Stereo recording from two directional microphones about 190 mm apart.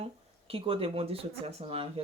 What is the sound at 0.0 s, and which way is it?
Speech, 30° right (ahead or behind).